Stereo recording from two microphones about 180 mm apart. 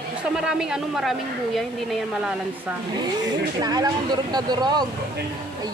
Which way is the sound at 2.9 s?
20° right (ahead or behind).